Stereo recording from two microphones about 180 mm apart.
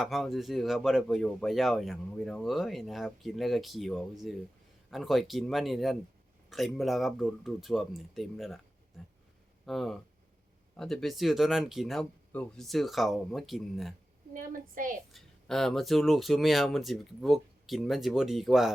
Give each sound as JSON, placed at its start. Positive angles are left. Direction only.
{"t": 0.0, "sound": "speech", "side_deg": 0}
{"t": 9.6, "sound": "speech", "side_deg": 0}
{"t": 14.3, "sound": "a woman's voice", "side_deg": -50}
{"t": 15.1, "sound": "speech", "side_deg": 0}